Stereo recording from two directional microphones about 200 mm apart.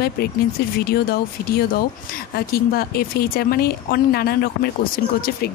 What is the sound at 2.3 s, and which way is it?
Speech, 50° left (ahead or behind).